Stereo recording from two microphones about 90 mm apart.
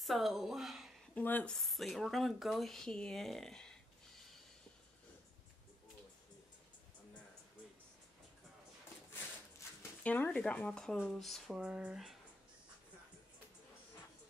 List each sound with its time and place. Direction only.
0.0 s speech: centre (ahead or behind)
1.1 s a woman's voice: 20° left (ahead or behind)
1.5 s speech: centre (ahead or behind)
10.0 s speech: 20° left (ahead or behind); by 11.5 s centre (ahead or behind)
11.5 s speech: 10° right (ahead or behind)